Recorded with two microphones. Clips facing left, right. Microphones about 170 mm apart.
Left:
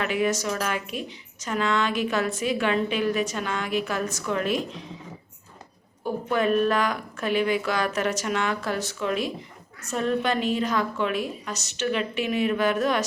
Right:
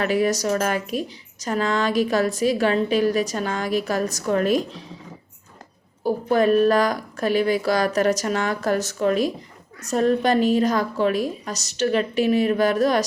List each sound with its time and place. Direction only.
0.0 s a woman's voice: 40° right (ahead or behind)
6.0 s a woman's voice: 35° right (ahead or behind)